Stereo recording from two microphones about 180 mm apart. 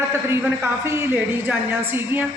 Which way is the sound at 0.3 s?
15° right (ahead or behind).